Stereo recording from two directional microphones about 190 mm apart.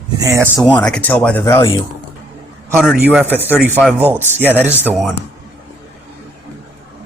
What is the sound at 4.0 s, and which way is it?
Speech, 10° right (ahead or behind).